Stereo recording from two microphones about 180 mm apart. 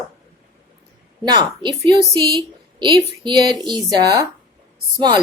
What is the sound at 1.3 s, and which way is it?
A woman's voice, 25° right (ahead or behind).